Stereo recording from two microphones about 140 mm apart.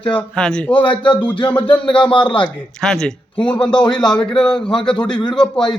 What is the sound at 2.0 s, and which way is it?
Speech, 35° left (ahead or behind).